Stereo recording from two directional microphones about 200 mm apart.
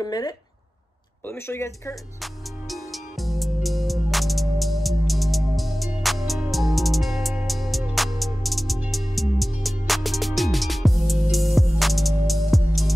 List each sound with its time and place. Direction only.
0.0 s speech: 20° left (ahead or behind)
2.7 s music: centre (ahead or behind)